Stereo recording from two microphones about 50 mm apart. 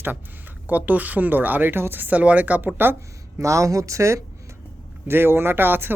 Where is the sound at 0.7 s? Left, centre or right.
Right.